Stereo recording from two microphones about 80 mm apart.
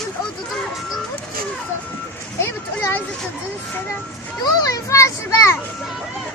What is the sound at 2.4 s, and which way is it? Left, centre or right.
Speech, left.